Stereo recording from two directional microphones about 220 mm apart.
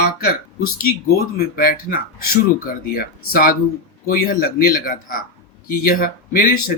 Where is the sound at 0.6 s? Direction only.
40° left (ahead or behind).